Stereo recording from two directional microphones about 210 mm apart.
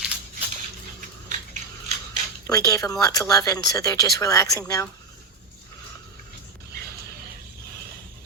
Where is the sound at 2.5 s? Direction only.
15° left (ahead or behind).